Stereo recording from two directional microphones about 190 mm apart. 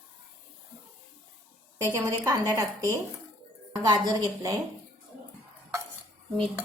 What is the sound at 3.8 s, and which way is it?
Speech, 20° right (ahead or behind).